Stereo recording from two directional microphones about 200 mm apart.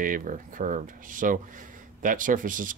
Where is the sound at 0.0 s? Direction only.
40° right (ahead or behind).